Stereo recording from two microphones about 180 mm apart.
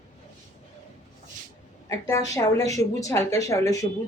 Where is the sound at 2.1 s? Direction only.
20° left (ahead or behind).